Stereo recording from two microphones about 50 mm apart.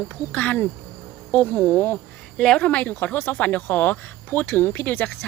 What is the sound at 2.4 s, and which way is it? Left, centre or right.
Speech, centre.